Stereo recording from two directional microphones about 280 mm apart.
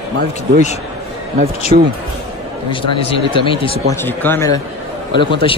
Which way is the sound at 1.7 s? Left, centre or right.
Right.